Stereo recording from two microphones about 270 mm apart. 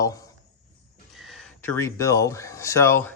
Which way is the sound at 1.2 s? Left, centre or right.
Centre.